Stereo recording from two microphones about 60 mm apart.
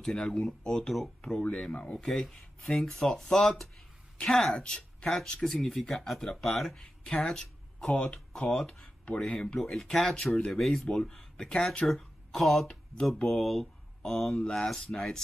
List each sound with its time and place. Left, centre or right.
0.0 s speech: centre
2.0 s speech: centre